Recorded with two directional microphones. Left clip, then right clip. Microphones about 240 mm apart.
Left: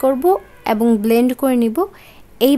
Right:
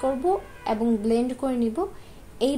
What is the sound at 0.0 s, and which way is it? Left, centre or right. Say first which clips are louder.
A woman's voice: left 9 dB; left.